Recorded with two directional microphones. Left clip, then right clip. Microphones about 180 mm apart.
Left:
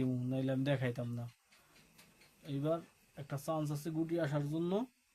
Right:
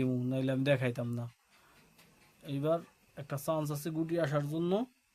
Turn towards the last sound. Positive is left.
turn(degrees=-35)  # may be behind; listen again after turning